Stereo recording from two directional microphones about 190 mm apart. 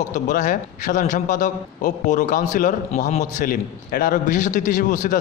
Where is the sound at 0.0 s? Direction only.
40° left (ahead or behind).